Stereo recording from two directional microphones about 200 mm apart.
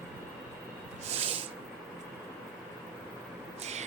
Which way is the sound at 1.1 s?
30° right (ahead or behind).